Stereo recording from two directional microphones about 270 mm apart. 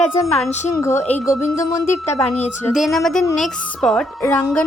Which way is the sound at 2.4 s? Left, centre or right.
Centre.